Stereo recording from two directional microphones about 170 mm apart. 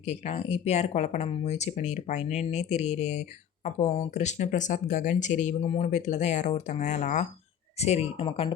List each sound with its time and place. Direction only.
0.0 s speech: 40° left (ahead or behind)